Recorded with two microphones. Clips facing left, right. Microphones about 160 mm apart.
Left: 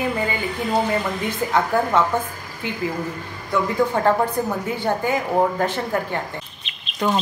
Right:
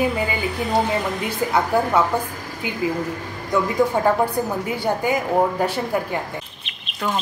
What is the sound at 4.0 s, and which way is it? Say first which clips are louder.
A woman's voice: even; 10° right (ahead or behind).